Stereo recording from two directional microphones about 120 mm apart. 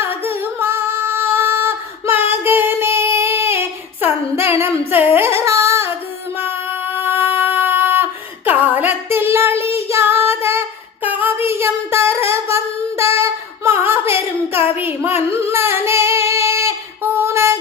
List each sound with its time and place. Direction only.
0.3 s female singing: 20° right (ahead or behind)
4.9 s a sound: 15° right (ahead or behind)
6.3 s child singing: 20° right (ahead or behind)
11.0 s singing: 15° right (ahead or behind)
15.9 s female singing: 20° right (ahead or behind)